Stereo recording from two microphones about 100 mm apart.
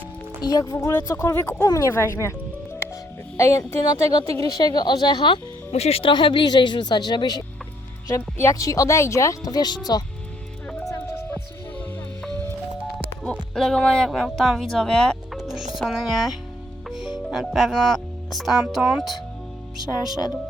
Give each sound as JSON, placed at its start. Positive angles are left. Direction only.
{"t": 0.4, "sound": "speech", "side_deg": 40}
{"t": 3.3, "sound": "speech", "side_deg": 30}
{"t": 5.7, "sound": "speech", "side_deg": 85}
{"t": 8.1, "sound": "speech", "side_deg": 30}
{"t": 13.5, "sound": "speech", "side_deg": 5}
{"t": 16.9, "sound": "music", "side_deg": -5}
{"t": 17.2, "sound": "speech", "side_deg": 0}